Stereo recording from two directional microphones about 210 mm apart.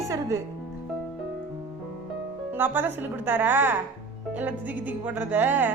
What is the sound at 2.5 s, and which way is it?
A woman's voice, 10° right (ahead or behind).